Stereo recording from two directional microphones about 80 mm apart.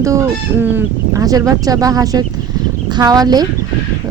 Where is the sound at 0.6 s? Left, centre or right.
Right.